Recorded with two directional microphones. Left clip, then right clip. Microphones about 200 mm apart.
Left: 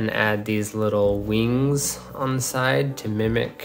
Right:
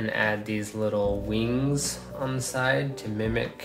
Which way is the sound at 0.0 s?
45° left (ahead or behind).